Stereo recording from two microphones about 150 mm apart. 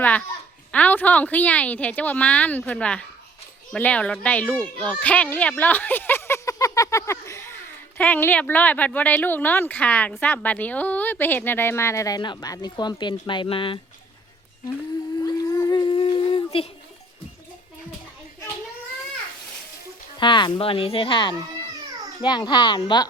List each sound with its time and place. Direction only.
0.0 s a child's voice: 10° left (ahead or behind); by 13.7 s 35° left (ahead or behind)
15.4 s humming: 25° left (ahead or behind)
20.1 s speech: 30° left (ahead or behind)